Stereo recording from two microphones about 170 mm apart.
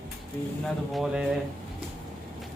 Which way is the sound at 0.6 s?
Centre (ahead or behind).